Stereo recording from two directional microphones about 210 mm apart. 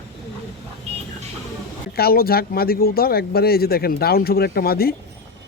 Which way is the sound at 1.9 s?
45° left (ahead or behind).